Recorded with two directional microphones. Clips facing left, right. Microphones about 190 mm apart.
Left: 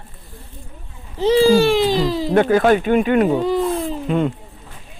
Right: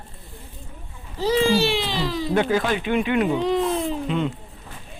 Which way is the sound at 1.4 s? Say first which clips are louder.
Left 7 dB; 45° left (ahead or behind).